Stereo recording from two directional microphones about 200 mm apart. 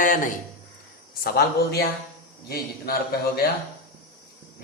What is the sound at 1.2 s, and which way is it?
Speech, 50° left (ahead or behind).